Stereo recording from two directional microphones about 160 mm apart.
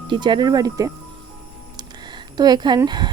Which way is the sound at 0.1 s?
30° right (ahead or behind).